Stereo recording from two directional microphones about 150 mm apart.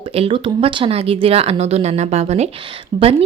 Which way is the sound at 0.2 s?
35° right (ahead or behind).